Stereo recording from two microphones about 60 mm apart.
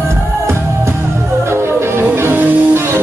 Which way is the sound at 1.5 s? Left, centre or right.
Right.